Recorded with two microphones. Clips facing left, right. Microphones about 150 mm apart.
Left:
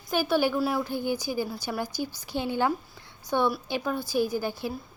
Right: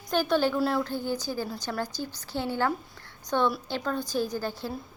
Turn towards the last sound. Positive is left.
turn(degrees=15)  # may be behind; listen again after turning